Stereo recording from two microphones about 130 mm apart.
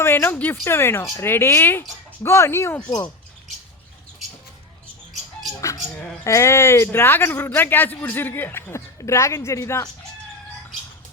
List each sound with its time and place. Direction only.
0.0 s a man's voice: 15° left (ahead or behind)
5.5 s a sound: 25° left (ahead or behind)
6.2 s a man's voice: 20° left (ahead or behind)